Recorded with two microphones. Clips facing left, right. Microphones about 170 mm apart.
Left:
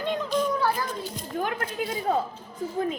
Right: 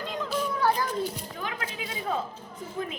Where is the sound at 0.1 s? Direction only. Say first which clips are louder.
Left 6 dB; centre (ahead or behind).